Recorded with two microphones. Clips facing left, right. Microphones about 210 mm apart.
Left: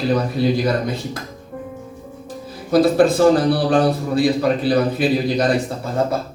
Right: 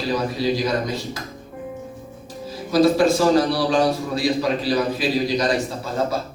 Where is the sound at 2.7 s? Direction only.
55° left (ahead or behind).